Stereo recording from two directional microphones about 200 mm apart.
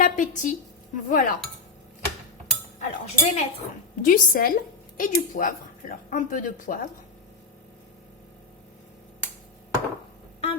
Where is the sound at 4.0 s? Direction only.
45° left (ahead or behind).